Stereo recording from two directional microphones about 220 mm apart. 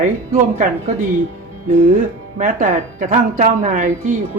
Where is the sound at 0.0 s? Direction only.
35° right (ahead or behind).